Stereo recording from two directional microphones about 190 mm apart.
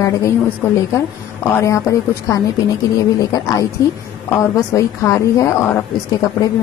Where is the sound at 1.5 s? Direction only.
15° left (ahead or behind).